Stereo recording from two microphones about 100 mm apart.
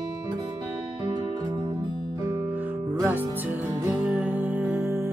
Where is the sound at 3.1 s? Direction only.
20° right (ahead or behind).